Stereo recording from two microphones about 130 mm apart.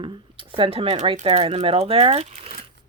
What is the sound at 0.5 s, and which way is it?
Speech, 45° right (ahead or behind).